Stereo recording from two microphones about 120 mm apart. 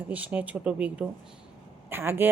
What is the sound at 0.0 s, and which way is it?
A woman's voice, 15° right (ahead or behind).